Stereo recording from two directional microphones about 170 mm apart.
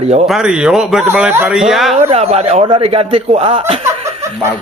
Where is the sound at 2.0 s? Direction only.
40° right (ahead or behind).